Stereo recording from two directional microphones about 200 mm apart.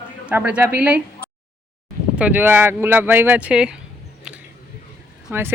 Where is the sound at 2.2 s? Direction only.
10° right (ahead or behind).